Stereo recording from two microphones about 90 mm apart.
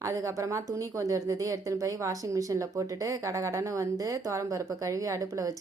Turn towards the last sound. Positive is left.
turn(degrees=-40)  # may be behind; listen again after turning